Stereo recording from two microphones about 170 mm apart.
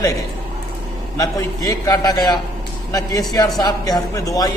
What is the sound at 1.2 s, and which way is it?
A man's voice, 20° left (ahead or behind).